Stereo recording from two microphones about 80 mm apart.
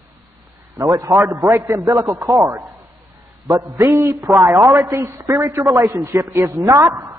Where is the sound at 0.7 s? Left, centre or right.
Right.